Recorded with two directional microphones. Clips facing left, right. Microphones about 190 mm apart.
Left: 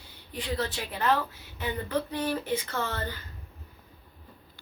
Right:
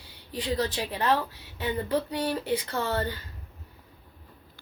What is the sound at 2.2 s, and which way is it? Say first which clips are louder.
Speech: right 1 dB; 35° right (ahead or behind).